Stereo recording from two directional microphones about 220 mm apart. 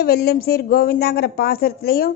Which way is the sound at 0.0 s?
45° left (ahead or behind).